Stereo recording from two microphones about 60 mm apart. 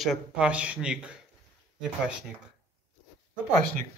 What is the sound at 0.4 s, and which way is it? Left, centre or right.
Speech, centre.